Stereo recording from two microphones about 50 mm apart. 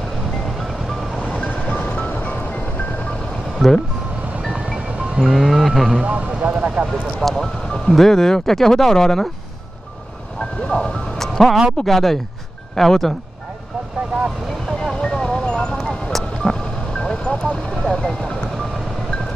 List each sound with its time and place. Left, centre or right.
1.4 s music: left
3.5 s speech: centre
4.5 s music: centre
5.3 s music: centre
6.0 s speech: right
7.2 s speech: centre
10.7 s music: centre
11.8 s speech: centre
14.8 s music: centre
15.8 s music: centre